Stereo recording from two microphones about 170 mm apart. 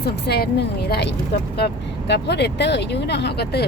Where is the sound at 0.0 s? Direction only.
70° left (ahead or behind).